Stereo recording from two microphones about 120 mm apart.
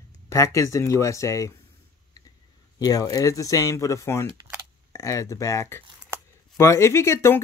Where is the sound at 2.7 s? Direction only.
30° left (ahead or behind).